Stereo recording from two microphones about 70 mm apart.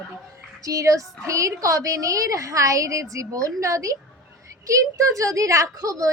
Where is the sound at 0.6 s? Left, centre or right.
Right.